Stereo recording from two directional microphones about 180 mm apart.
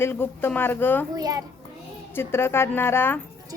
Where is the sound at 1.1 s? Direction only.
20° right (ahead or behind).